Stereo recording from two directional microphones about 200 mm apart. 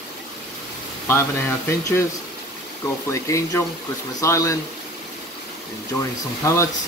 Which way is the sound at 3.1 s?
15° left (ahead or behind).